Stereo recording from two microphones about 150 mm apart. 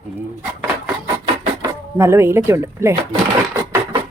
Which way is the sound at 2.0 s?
15° right (ahead or behind).